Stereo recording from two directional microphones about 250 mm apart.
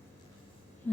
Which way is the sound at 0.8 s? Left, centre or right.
Centre.